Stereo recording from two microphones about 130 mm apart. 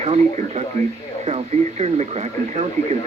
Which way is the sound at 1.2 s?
55° right (ahead or behind).